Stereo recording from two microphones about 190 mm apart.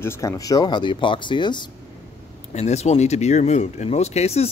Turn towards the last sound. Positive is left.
turn(degrees=35)  # may be behind; listen again after turning